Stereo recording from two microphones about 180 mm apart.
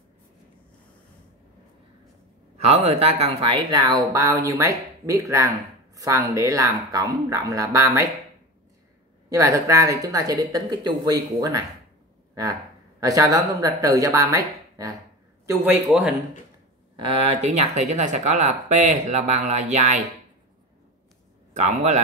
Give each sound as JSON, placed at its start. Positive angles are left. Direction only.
{"t": 2.6, "sound": "a woman's voice", "side_deg": -35}
{"t": 9.3, "sound": "speech", "side_deg": -20}
{"t": 13.0, "sound": "a man's voice", "side_deg": -20}
{"t": 15.9, "sound": "speech", "side_deg": 0}
{"t": 16.9, "sound": "speech", "side_deg": -30}
{"t": 21.5, "sound": "speech", "side_deg": -40}